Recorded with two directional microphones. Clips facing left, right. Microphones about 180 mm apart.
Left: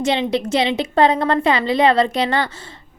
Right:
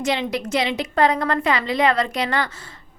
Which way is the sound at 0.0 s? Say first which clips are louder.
Left 4 dB; 25° left (ahead or behind).